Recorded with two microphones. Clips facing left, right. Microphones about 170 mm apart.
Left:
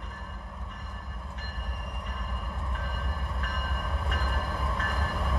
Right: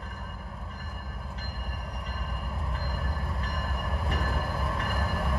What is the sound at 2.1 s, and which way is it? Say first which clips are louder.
Train: right 1 dB; centre (ahead or behind).